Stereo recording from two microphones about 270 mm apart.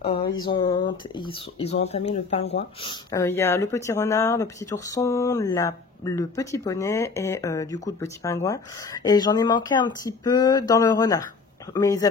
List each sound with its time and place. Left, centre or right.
0.5 s speech: centre